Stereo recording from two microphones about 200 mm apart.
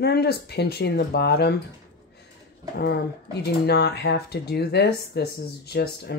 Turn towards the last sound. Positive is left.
turn(degrees=55)  # may be behind; listen again after turning